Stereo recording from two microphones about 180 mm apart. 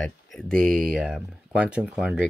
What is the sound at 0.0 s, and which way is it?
Speech, 5° left (ahead or behind).